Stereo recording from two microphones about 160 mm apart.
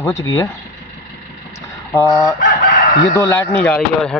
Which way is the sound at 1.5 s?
20° left (ahead or behind).